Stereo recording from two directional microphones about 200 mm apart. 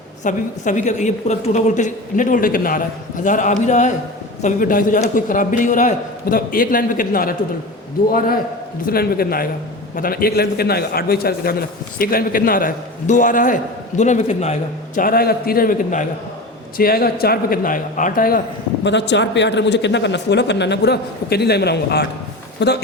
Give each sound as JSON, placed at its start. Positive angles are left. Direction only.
{"t": 0.3, "sound": "a woman's voice", "side_deg": 40}
{"t": 8.9, "sound": "a man's voice", "side_deg": 50}
{"t": 14.9, "sound": "a man's voice", "side_deg": 45}